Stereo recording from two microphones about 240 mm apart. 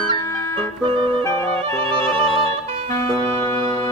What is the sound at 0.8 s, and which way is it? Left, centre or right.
Music, right.